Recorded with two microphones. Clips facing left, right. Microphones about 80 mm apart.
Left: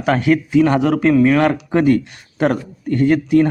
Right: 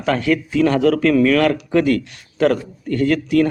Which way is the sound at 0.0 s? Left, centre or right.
Left.